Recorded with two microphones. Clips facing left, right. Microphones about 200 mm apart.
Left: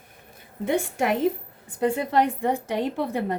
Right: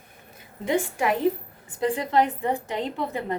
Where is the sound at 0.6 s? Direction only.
60° left (ahead or behind).